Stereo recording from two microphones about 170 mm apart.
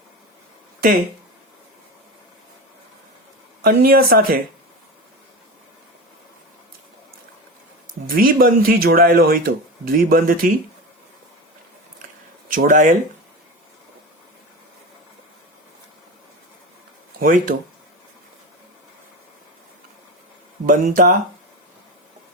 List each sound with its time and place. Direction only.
3.6 s speech: 60° right (ahead or behind)
8.0 s speech: 60° right (ahead or behind)
12.5 s speech: 55° right (ahead or behind)
17.2 s speech: 55° right (ahead or behind)
20.7 s speech: 55° right (ahead or behind)